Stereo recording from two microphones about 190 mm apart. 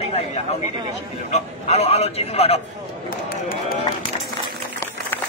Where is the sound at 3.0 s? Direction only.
50° left (ahead or behind).